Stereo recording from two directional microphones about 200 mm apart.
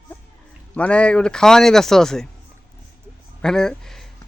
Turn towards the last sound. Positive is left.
turn(degrees=0)  # may be behind; listen again after turning